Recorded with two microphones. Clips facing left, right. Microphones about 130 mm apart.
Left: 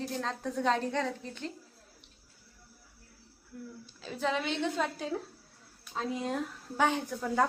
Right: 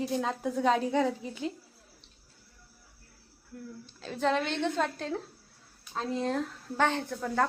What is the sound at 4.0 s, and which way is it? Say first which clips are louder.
Speech: right 4 dB; 5° left (ahead or behind).